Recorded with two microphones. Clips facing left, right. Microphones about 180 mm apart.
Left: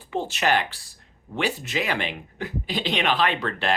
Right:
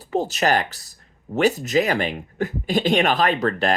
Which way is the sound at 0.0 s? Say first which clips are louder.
Right 4 dB; 40° right (ahead or behind).